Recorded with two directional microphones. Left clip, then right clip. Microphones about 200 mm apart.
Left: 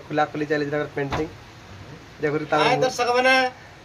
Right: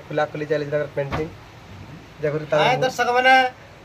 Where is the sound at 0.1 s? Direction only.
40° left (ahead or behind).